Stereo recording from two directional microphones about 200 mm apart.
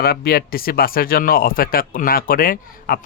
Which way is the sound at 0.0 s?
50° left (ahead or behind).